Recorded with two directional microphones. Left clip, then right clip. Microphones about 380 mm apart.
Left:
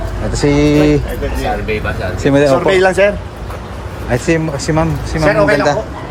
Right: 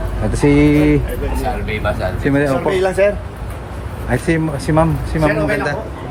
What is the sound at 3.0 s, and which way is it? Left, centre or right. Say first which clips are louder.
Speech: left 3 dB; left.